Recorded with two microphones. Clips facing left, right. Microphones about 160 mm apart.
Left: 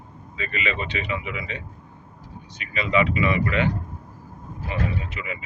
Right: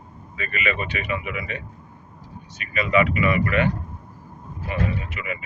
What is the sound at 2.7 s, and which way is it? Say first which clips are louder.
Speech: right 2 dB; 25° left (ahead or behind).